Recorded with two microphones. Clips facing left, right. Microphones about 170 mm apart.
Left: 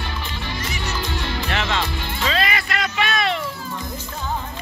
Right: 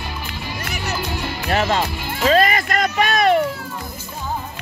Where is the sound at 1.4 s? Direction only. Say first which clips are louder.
Right 7 dB; 40° right (ahead or behind).